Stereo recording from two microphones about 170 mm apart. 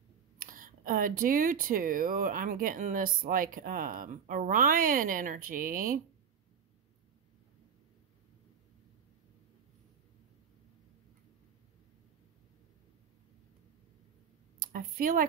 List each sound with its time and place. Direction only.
0.4 s speech: 55° right (ahead or behind)
14.6 s speech: 55° right (ahead or behind)